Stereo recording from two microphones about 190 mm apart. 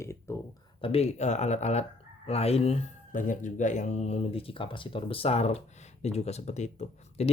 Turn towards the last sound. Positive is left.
turn(degrees=35)  # may be behind; listen again after turning